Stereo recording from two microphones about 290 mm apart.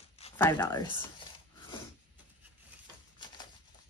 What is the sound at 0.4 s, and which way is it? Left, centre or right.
Speech, centre.